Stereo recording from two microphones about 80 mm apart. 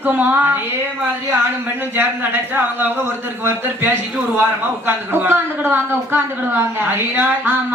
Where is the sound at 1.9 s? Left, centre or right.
Right.